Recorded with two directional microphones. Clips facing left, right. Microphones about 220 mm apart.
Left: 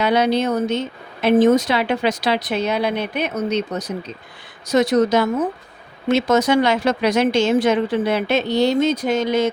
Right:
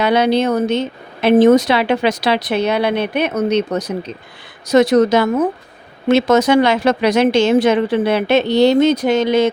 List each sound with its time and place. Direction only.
0.0 s speech: 70° right (ahead or behind)